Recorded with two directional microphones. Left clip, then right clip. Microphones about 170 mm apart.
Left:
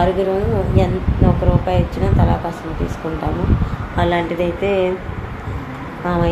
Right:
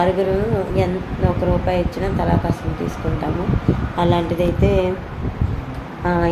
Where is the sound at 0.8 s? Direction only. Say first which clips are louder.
Left 2 dB; 10° right (ahead or behind).